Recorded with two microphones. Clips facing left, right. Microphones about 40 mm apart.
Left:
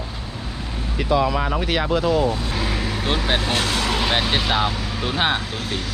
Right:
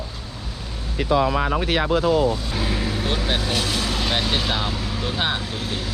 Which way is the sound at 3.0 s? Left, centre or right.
Left.